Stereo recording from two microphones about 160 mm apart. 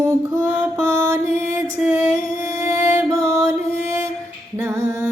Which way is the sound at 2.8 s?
20° right (ahead or behind).